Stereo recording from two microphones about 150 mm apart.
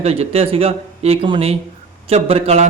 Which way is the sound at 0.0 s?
40° right (ahead or behind).